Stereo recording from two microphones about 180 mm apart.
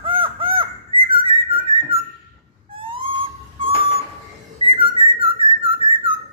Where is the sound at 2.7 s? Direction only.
30° right (ahead or behind).